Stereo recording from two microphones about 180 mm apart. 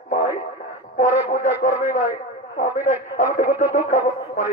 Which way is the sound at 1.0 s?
45° left (ahead or behind).